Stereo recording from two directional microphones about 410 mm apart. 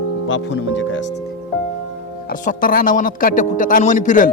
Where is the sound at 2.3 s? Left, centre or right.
Centre.